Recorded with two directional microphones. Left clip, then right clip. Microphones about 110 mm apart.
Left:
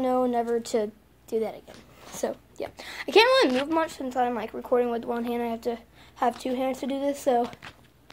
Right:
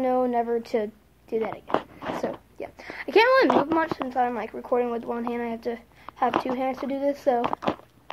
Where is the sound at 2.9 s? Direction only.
10° left (ahead or behind).